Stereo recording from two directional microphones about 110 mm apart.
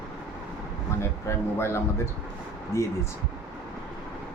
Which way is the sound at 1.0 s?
25° left (ahead or behind).